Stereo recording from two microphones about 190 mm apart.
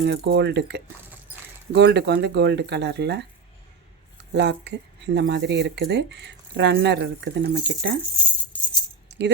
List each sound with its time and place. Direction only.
0.0 s speech: 65° right (ahead or behind)
1.3 s keys jangling: 10° right (ahead or behind)
1.7 s speech: 65° right (ahead or behind)
4.4 s speech: 65° right (ahead or behind)
8.5 s music: 5° left (ahead or behind)
9.0 s music: 65° right (ahead or behind)